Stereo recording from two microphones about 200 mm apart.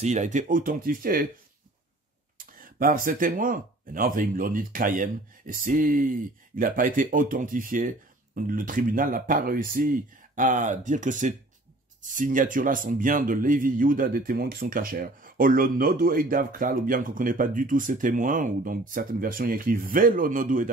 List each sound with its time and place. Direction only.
0.0 s speech: 35° right (ahead or behind)
2.3 s speech: 45° right (ahead or behind)